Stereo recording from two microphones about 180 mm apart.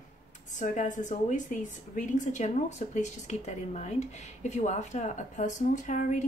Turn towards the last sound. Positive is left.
turn(degrees=45)  # may be behind; listen again after turning